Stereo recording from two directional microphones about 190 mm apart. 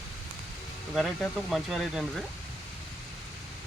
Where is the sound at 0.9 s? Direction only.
Centre (ahead or behind).